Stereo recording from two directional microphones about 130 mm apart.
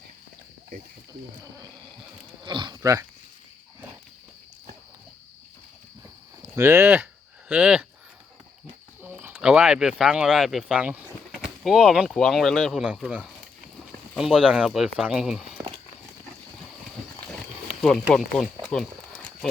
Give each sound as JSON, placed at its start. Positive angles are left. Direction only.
{"t": 2.4, "sound": "livestock", "side_deg": -35}
{"t": 2.8, "sound": "speech", "side_deg": -25}
{"t": 6.6, "sound": "speech", "side_deg": -20}
{"t": 9.0, "sound": "speech", "side_deg": -15}
{"t": 13.1, "sound": "speech", "side_deg": -10}
{"t": 17.7, "sound": "speech", "side_deg": 5}
{"t": 18.1, "sound": "a sound", "side_deg": 5}